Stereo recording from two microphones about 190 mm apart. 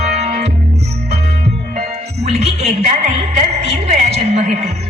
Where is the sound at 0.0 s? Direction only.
35° right (ahead or behind).